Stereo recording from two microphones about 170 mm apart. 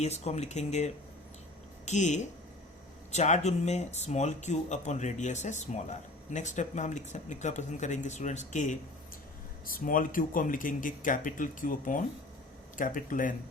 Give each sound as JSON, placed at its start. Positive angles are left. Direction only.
{"t": 0.0, "sound": "speech", "side_deg": 40}